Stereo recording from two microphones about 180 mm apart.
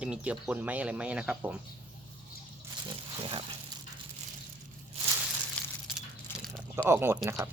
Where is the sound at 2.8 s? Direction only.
30° right (ahead or behind).